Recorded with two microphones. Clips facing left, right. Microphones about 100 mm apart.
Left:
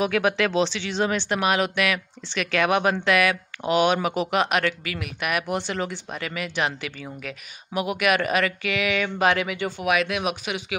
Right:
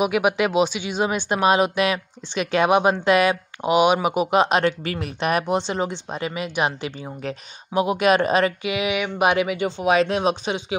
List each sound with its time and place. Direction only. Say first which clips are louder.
0.0 s speech: right 2 dB; 15° right (ahead or behind)